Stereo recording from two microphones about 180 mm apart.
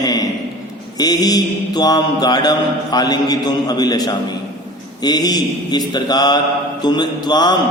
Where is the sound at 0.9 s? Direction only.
20° left (ahead or behind).